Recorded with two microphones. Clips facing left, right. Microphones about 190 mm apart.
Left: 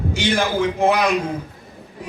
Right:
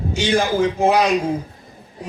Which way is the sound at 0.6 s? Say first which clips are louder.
Right 1 dB; 60° left (ahead or behind).